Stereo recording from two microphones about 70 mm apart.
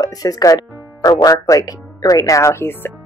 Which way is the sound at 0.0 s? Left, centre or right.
Left.